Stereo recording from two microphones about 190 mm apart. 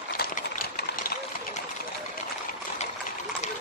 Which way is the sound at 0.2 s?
50° left (ahead or behind).